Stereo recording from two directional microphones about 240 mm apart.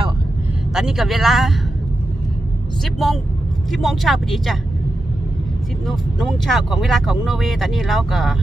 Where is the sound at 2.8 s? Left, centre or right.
Centre.